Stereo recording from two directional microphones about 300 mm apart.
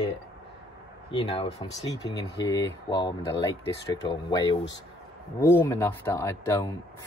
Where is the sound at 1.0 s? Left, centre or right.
Centre.